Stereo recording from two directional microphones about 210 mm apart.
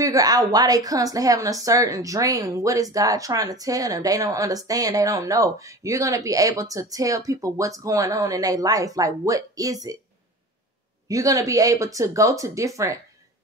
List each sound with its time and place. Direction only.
0.0 s speech: 15° right (ahead or behind)
11.1 s speech: 15° right (ahead or behind)